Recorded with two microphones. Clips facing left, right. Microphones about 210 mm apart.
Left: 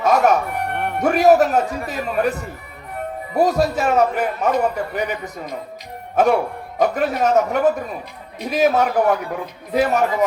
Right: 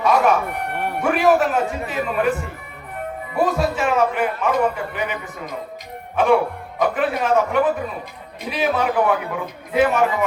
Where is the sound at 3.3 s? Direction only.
40° left (ahead or behind).